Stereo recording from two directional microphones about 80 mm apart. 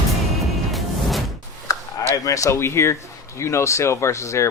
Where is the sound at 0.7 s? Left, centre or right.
Centre.